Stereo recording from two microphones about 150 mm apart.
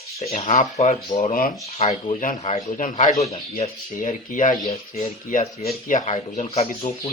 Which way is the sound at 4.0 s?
60° left (ahead or behind).